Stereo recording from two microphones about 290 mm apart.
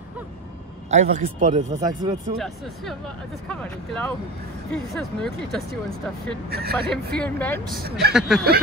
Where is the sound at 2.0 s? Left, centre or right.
Centre.